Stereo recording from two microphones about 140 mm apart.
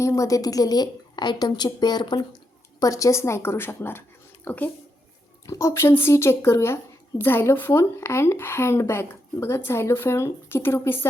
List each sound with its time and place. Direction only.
0.0 s a woman's voice: 20° left (ahead or behind)